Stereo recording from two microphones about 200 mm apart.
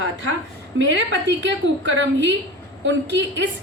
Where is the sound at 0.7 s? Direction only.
65° right (ahead or behind).